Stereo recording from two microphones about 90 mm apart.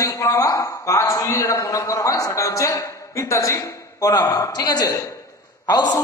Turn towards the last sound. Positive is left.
turn(degrees=50)  # may be behind; listen again after turning